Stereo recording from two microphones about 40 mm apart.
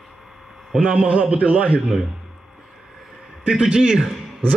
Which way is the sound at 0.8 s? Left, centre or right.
Right.